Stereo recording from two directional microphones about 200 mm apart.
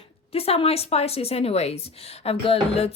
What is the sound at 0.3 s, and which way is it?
A woman's voice, 30° left (ahead or behind).